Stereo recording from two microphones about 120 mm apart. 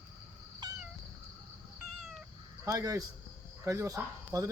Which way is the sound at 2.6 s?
30° right (ahead or behind).